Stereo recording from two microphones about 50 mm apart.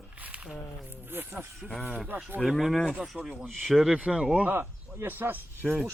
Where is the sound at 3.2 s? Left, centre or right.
Right.